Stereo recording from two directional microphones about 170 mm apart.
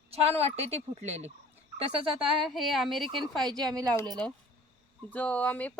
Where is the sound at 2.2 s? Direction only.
Centre (ahead or behind).